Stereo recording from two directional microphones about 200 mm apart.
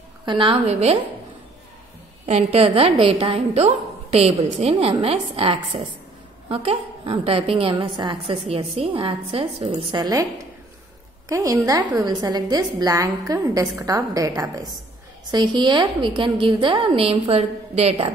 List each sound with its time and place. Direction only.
0.2 s a woman's voice: 25° right (ahead or behind)
2.2 s a woman's voice: 30° right (ahead or behind)
11.2 s a woman's voice: 15° right (ahead or behind)